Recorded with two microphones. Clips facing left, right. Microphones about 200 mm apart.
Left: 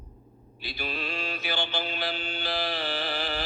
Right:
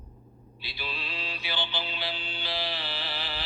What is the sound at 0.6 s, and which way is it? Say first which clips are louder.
Mantra: left 5 dB; 45° left (ahead or behind).